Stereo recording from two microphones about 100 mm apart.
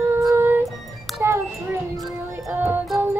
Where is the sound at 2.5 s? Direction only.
20° right (ahead or behind).